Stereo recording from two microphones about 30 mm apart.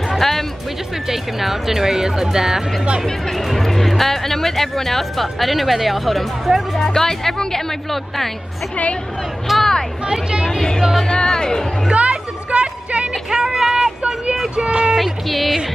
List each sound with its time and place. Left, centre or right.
0.1 s music: centre
1.0 s speech: centre
3.1 s speech: centre
6.8 s speech: centre
9.6 s speech: centre
11.9 s music: right
13.3 s a sound: centre
14.5 s speech: right
15.0 s speech: centre